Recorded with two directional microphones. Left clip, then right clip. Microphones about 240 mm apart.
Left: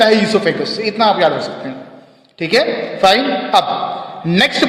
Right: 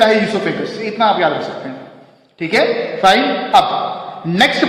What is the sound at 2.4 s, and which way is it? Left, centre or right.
A man's voice, left.